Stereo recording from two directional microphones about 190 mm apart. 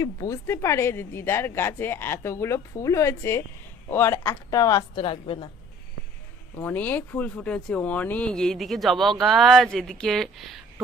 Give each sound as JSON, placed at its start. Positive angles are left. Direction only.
{"t": 0.0, "sound": "a woman's voice", "side_deg": 15}
{"t": 6.6, "sound": "a woman's voice", "side_deg": 10}